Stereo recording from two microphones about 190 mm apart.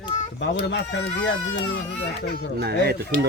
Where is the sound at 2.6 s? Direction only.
60° right (ahead or behind).